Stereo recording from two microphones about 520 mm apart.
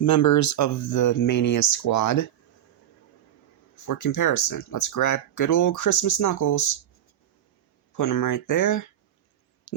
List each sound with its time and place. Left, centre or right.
0.0 s speech: left
3.8 s speech: left
7.9 s speech: left
9.7 s a sound: left